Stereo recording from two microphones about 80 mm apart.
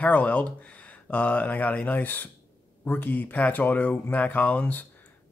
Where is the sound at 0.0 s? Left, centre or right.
Centre.